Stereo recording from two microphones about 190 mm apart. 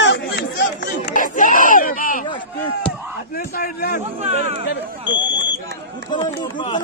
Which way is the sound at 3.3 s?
50° left (ahead or behind).